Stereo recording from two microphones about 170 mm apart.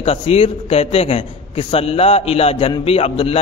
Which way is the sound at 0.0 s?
35° left (ahead or behind).